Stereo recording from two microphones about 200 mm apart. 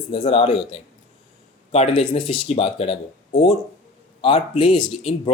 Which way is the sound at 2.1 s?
25° left (ahead or behind).